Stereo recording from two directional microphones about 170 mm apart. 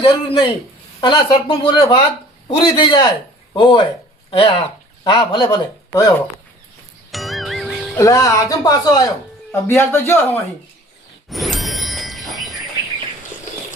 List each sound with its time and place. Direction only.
0.0 s speech: 30° left (ahead or behind)
7.1 s music: centre (ahead or behind)
7.9 s a man's voice: 20° left (ahead or behind)
11.3 s a sound: centre (ahead or behind)